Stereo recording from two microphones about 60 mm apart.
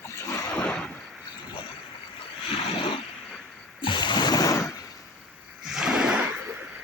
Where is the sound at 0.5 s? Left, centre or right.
Centre.